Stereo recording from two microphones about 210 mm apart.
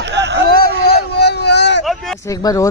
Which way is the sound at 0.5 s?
45° left (ahead or behind).